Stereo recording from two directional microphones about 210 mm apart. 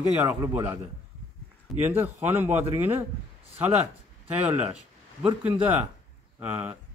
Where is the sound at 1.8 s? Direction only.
10° right (ahead or behind).